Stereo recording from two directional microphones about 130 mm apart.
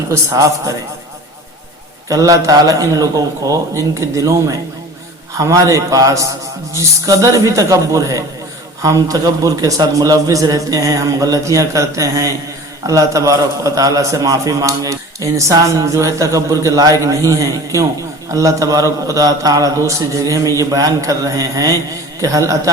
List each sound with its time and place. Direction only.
0.1 s a man's voice: 25° right (ahead or behind)
2.0 s a man's voice: 25° right (ahead or behind)
5.4 s a man's voice: 25° right (ahead or behind)